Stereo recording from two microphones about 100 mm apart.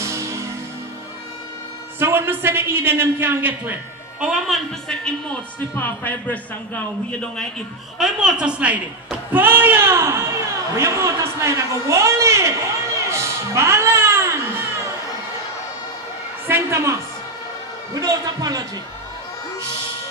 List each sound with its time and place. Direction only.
0.0 s music: 30° right (ahead or behind)
2.0 s a man's voice: 20° right (ahead or behind)
4.3 s a woman's voice: centre (ahead or behind)
5.0 s speech: 15° left (ahead or behind)
8.0 s a woman's voice: 10° right (ahead or behind); by 14.6 s 25° right (ahead or behind)
16.4 s a man's voice: 25° right (ahead or behind)
17.9 s a man's voice: 40° right (ahead or behind)